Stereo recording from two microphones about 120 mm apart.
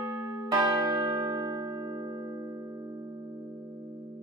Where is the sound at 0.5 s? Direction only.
30° right (ahead or behind).